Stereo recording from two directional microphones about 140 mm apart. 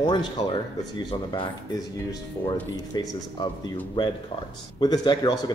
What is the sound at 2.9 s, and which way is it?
Speech, 30° left (ahead or behind).